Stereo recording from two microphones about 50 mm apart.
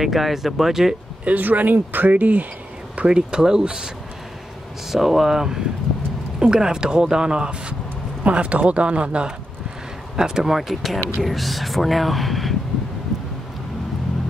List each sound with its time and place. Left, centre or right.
0.0 s speech: centre
1.2 s speech: right
3.1 s speech: centre
4.9 s speech: centre